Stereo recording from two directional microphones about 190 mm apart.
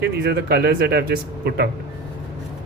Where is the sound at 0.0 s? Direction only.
60° right (ahead or behind).